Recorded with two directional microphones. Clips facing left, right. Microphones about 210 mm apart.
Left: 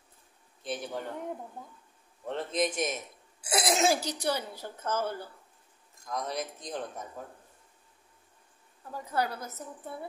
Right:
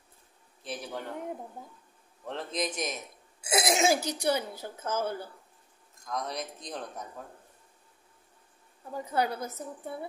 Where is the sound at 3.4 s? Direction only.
25° right (ahead or behind).